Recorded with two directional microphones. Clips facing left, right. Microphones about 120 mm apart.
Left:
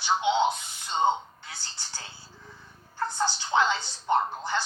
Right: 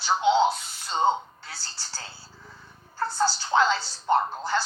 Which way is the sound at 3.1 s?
20° left (ahead or behind).